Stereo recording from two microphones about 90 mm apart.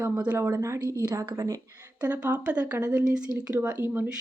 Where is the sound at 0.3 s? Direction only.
30° right (ahead or behind).